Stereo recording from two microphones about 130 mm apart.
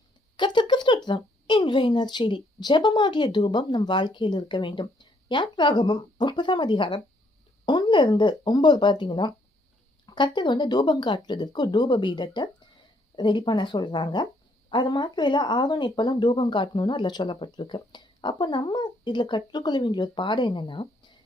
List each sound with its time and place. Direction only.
0.3 s speech: 35° left (ahead or behind)